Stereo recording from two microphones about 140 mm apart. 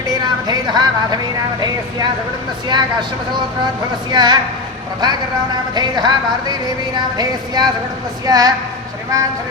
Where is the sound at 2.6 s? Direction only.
30° right (ahead or behind).